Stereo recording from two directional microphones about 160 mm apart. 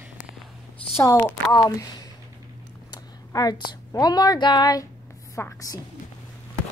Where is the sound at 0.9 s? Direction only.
15° left (ahead or behind).